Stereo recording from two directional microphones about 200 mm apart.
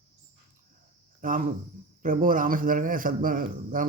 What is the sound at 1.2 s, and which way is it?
A man's voice, 40° right (ahead or behind).